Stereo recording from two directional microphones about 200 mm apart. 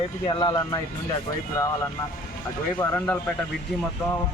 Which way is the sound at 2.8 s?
10° left (ahead or behind).